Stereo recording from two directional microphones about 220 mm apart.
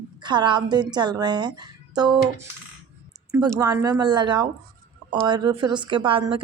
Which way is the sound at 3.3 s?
15° right (ahead or behind).